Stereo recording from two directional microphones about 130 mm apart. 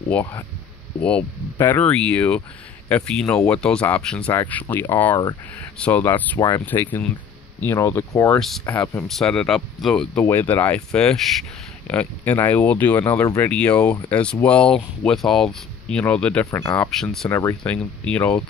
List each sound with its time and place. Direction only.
0.1 s speech: 15° left (ahead or behind)
8.4 s speech: centre (ahead or behind)
8.6 s speech: 15° left (ahead or behind)
9.0 s speech: 5° left (ahead or behind)
10.2 s speech: 15° left (ahead or behind)
16.4 s speech: 20° left (ahead or behind)
16.9 s speech: 5° left (ahead or behind)
17.3 s speech: 20° left (ahead or behind)
17.7 s speech: 10° left (ahead or behind)